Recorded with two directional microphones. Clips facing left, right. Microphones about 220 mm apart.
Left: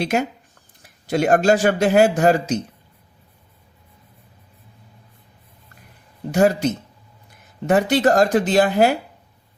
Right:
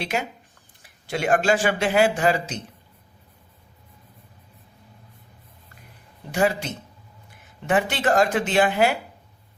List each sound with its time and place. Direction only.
0.0 s speech: 45° left (ahead or behind)
6.3 s speech: 40° left (ahead or behind)